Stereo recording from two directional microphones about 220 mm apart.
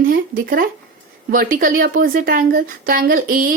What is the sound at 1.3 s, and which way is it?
A woman's voice, 40° right (ahead or behind).